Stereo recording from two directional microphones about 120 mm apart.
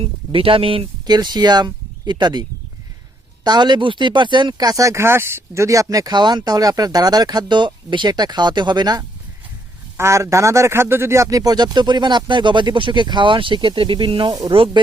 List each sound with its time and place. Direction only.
0.0 s speech: 50° right (ahead or behind); by 9.0 s 35° right (ahead or behind)
10.0 s speech: 25° right (ahead or behind); by 14.3 s 45° right (ahead or behind)